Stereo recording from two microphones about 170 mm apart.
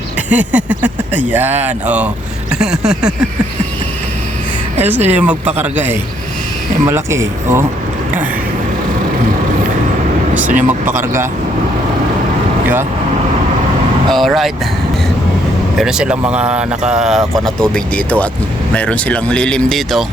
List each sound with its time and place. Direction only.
0.3 s speech: 10° right (ahead or behind)
2.5 s a sound: 5° right (ahead or behind)
5.0 s speech: 10° right (ahead or behind)
10.5 s speech: 50° right (ahead or behind)
14.1 s speech: centre (ahead or behind)
15.8 s speech: 5° right (ahead or behind)